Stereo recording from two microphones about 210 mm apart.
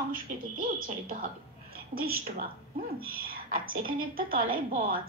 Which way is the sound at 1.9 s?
45° right (ahead or behind).